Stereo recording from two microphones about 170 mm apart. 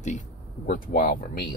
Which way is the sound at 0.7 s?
60° left (ahead or behind).